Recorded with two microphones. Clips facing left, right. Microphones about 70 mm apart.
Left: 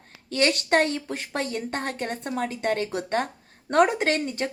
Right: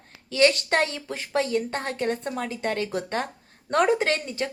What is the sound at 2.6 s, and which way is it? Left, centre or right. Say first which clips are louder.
Speech: left 1 dB; left.